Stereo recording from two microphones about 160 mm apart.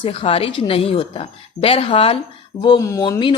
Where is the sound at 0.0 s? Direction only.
35° left (ahead or behind).